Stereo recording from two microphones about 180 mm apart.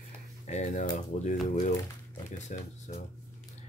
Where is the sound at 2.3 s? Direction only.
40° left (ahead or behind).